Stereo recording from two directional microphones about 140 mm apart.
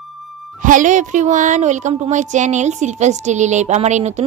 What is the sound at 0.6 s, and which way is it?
Speech, 70° right (ahead or behind).